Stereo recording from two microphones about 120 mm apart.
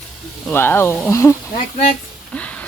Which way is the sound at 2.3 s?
10° left (ahead or behind).